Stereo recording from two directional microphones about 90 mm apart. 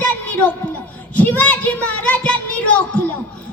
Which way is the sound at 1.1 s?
15° left (ahead or behind).